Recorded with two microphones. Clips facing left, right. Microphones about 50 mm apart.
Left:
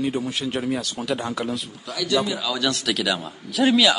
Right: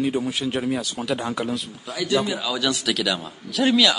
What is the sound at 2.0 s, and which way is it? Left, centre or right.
Speech, centre.